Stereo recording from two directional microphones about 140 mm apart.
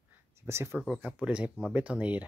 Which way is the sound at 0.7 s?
5° right (ahead or behind).